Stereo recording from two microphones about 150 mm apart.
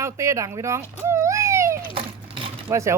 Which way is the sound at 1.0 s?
20° right (ahead or behind).